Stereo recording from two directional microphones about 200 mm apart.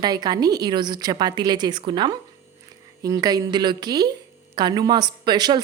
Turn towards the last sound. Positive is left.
turn(degrees=-20)  # may be behind; listen again after turning